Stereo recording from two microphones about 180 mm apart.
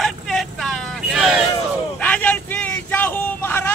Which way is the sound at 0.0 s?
Centre (ahead or behind).